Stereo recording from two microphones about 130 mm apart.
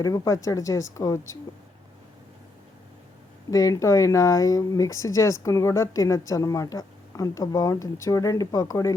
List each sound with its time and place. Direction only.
0.0 s speech: 25° left (ahead or behind)
3.5 s speech: 25° left (ahead or behind)